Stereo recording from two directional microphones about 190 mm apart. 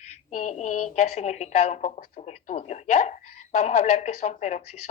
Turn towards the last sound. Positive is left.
turn(degrees=40)  # may be behind; listen again after turning